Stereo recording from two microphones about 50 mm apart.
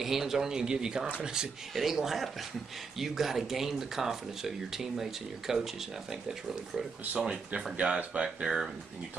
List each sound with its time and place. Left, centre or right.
0.0 s speech: centre
7.2 s speech: centre
7.7 s speech: right